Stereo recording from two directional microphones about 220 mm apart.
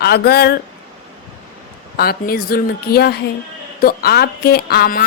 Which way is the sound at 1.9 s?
45° left (ahead or behind).